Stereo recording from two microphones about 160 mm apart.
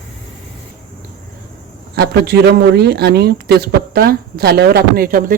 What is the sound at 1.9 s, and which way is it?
Speech, 90° right.